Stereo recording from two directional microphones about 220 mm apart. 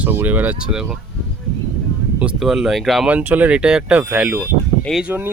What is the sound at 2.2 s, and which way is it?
Speech, centre (ahead or behind).